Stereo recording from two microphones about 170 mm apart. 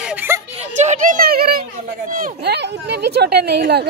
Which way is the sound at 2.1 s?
65° right (ahead or behind).